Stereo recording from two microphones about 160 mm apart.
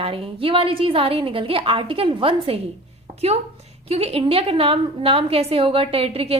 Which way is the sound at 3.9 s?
40° right (ahead or behind).